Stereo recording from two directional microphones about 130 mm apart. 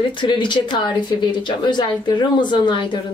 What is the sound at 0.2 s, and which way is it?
A woman's voice, 35° left (ahead or behind).